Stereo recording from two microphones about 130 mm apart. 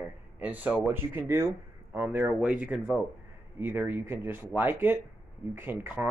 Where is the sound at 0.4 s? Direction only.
10° right (ahead or behind).